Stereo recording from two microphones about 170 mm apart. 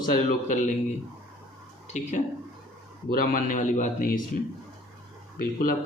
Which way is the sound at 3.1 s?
55° left (ahead or behind).